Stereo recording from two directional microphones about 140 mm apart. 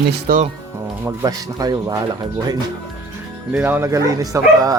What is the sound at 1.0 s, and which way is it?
Speech, 25° right (ahead or behind).